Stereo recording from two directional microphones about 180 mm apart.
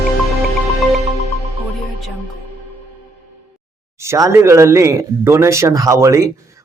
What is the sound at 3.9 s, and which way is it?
Speech, 15° right (ahead or behind).